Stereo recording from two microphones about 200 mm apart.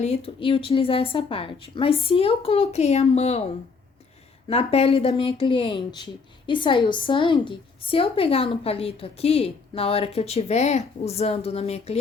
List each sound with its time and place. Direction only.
0.0 s speech: 30° left (ahead or behind)
4.4 s speech: 30° left (ahead or behind)